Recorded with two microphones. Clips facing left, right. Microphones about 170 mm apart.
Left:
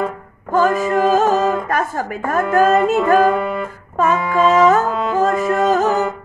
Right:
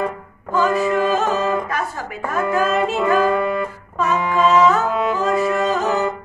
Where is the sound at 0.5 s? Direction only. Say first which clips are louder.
Left 3 dB; 50° left (ahead or behind).